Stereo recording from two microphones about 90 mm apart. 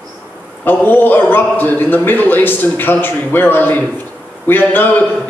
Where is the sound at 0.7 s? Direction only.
20° left (ahead or behind).